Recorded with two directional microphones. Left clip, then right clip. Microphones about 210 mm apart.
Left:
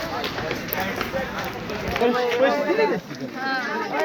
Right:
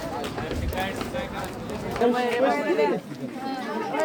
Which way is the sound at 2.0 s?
5° right (ahead or behind).